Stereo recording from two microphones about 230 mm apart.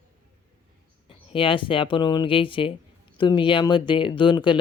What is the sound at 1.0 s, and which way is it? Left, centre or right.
Speech, left.